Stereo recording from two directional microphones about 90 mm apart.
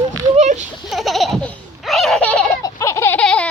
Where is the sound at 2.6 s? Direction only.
35° left (ahead or behind).